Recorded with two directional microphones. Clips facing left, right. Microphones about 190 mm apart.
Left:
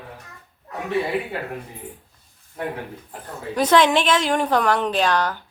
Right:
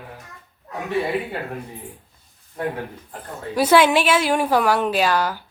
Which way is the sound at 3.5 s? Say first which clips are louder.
Right 1 dB; 10° right (ahead or behind).